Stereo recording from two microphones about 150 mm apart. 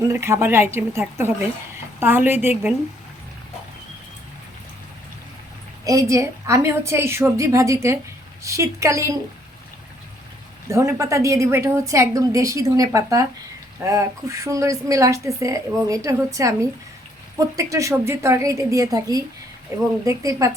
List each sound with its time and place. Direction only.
0.1 s a woman's voice: 15° right (ahead or behind)
5.8 s a woman's voice: 20° right (ahead or behind)
10.7 s a woman's voice: 20° right (ahead or behind)
17.6 s a woman's voice: 20° right (ahead or behind)